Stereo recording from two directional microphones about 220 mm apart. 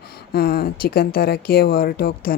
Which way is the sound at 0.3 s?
45° left (ahead or behind).